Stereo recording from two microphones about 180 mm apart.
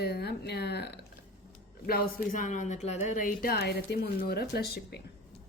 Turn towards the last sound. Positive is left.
turn(degrees=65)  # may be behind; listen again after turning